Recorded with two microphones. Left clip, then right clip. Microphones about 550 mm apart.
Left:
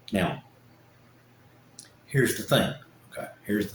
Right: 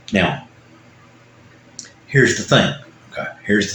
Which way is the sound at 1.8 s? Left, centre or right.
Left.